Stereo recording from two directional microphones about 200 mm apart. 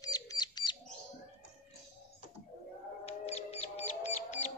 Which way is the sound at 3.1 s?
30° left (ahead or behind).